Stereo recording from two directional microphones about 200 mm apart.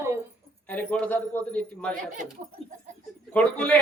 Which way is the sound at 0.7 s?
5° left (ahead or behind).